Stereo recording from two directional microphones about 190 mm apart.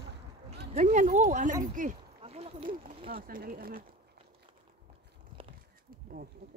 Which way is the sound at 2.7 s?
50° right (ahead or behind).